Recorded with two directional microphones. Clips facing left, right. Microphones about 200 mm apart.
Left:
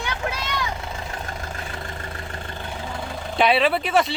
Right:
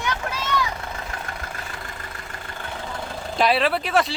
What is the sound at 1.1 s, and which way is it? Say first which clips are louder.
Vehicle: left 1 dB; 25° left (ahead or behind).